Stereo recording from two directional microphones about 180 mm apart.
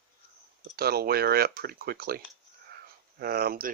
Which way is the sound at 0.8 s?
60° right (ahead or behind).